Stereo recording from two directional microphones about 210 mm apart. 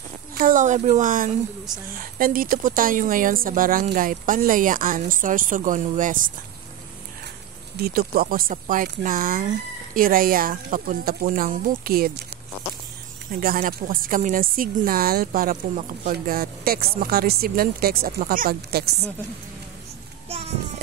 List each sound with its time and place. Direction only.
0.3 s speech: 40° right (ahead or behind)
7.8 s a woman's voice: 45° right (ahead or behind)
13.3 s a woman's voice: 45° right (ahead or behind)